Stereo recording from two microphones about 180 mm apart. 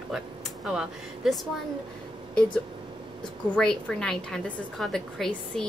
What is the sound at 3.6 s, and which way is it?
A woman's voice, 5° left (ahead or behind).